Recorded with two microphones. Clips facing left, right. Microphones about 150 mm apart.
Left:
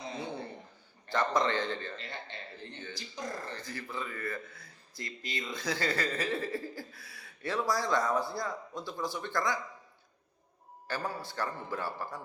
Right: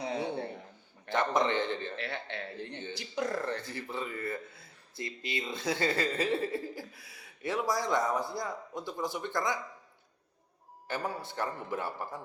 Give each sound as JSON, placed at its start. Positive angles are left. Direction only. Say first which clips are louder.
{"t": 0.0, "sound": "a sound", "louder": "right 5 dB", "side_deg": -75}
{"t": 1.1, "sound": "speech", "louder": "right 1 dB", "side_deg": -20}
{"t": 2.0, "sound": "speech", "louder": "right 6 dB", "side_deg": -70}
{"t": 3.7, "sound": "speech", "louder": "right 2 dB", "side_deg": -25}
{"t": 10.8, "sound": "speech", "louder": "right 1 dB", "side_deg": -20}